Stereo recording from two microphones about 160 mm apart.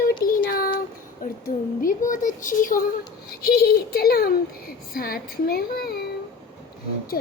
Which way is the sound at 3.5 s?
75° left (ahead or behind).